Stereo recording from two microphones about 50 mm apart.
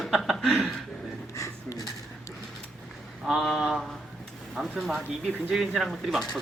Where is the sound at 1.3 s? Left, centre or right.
Left.